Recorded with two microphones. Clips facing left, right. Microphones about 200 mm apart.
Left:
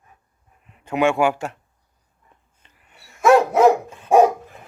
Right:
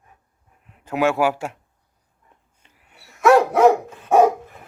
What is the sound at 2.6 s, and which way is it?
Dog, 5° right (ahead or behind).